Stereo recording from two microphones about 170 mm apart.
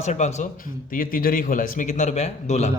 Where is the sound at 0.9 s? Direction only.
55° left (ahead or behind); by 2.7 s 40° left (ahead or behind).